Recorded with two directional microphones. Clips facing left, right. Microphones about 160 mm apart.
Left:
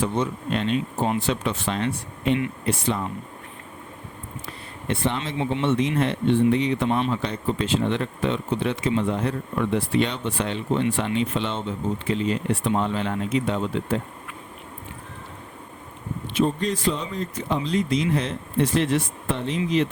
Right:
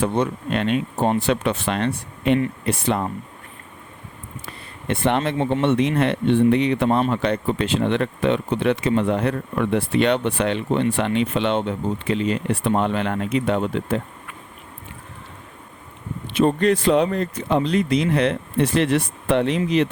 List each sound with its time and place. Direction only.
0.0 s speech: 60° right (ahead or behind)
4.9 s speech: 60° right (ahead or behind)
16.3 s speech: 65° right (ahead or behind)